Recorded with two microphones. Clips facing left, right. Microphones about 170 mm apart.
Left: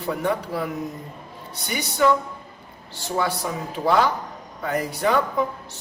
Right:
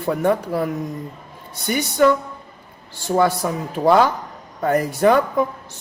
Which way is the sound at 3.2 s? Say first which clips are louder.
Right 6 dB; 50° right (ahead or behind).